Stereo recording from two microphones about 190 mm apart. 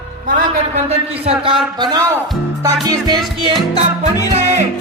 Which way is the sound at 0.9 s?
30° right (ahead or behind).